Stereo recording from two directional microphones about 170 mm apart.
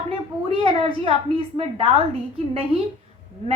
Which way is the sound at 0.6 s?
35° right (ahead or behind).